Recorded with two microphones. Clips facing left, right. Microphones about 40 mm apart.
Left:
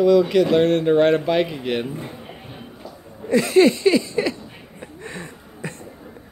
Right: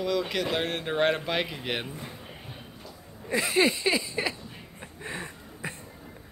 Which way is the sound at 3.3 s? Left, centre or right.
Centre.